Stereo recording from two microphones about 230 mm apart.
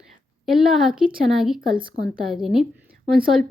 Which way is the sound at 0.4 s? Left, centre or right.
Centre.